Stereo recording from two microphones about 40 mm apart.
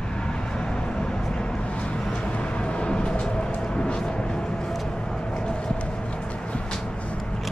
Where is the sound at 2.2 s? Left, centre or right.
Left.